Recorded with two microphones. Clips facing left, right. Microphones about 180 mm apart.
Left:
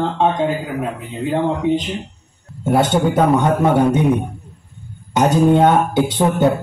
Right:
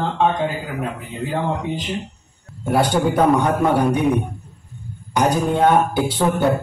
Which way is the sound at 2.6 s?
20° left (ahead or behind).